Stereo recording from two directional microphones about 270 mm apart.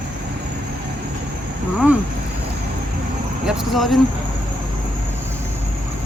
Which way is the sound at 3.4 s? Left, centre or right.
Centre.